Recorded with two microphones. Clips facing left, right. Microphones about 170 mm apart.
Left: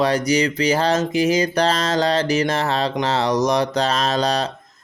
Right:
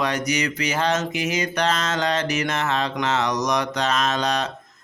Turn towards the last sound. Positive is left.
turn(degrees=35)  # may be behind; listen again after turning